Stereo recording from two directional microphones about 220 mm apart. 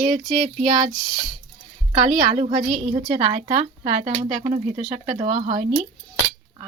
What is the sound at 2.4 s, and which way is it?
Speech, 35° right (ahead or behind).